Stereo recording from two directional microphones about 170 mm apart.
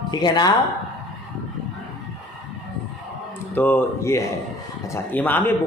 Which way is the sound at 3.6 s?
10° left (ahead or behind).